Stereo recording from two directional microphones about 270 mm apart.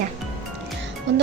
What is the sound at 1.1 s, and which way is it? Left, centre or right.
Speech, right.